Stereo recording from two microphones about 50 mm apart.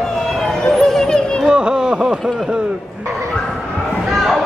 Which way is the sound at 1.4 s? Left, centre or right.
Centre.